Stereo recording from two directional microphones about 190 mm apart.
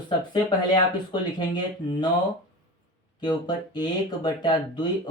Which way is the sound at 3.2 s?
20° left (ahead or behind).